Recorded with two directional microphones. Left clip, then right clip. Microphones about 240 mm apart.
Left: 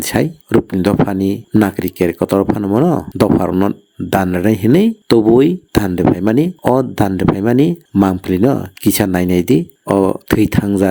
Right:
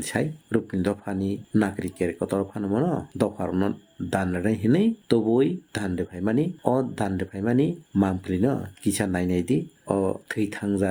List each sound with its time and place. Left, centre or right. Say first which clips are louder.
0.0 s speech: left 11 dB; left